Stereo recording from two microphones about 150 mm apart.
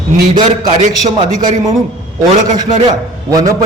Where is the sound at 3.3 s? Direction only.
25° right (ahead or behind).